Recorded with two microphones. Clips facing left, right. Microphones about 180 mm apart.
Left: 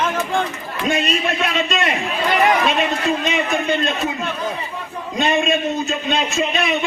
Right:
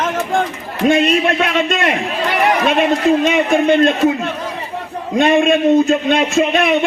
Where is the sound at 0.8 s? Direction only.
55° right (ahead or behind).